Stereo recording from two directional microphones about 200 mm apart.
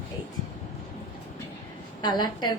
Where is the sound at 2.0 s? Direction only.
20° left (ahead or behind).